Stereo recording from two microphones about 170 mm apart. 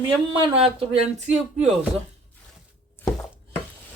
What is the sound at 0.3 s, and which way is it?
A woman's voice, 35° right (ahead or behind).